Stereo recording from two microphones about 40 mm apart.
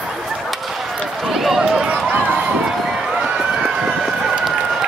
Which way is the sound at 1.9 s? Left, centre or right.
Right.